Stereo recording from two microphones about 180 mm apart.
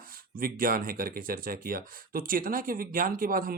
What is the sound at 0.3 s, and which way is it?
Speech, 50° right (ahead or behind).